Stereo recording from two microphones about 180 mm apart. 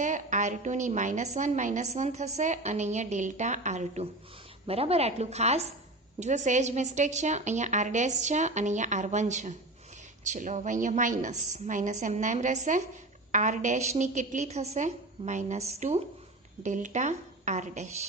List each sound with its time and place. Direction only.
0.0 s a woman's voice: 45° right (ahead or behind)